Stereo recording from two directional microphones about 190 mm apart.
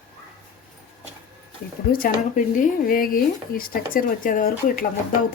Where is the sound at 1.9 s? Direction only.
50° left (ahead or behind).